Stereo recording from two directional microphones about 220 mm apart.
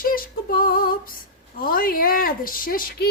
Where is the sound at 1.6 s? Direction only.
40° left (ahead or behind).